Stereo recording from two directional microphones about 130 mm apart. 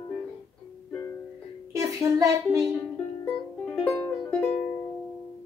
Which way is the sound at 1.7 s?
25° right (ahead or behind).